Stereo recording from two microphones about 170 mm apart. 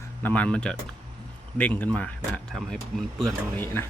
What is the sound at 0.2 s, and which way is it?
Speech, 10° left (ahead or behind).